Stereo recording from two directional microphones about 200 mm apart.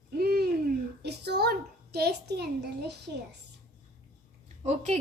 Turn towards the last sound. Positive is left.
turn(degrees=-35)  # may be behind; listen again after turning